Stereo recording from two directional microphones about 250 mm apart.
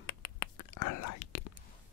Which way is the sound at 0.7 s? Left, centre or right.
Left.